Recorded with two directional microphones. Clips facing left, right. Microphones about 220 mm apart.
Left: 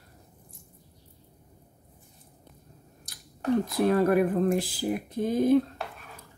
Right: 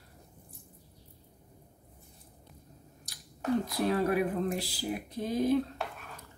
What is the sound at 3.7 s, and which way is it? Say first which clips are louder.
Speech: left 8 dB; 50° left (ahead or behind).